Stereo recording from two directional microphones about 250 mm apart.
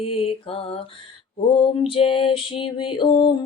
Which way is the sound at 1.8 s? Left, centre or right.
Left.